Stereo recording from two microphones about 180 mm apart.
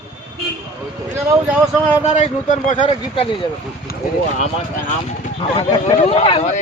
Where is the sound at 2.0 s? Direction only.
40° left (ahead or behind).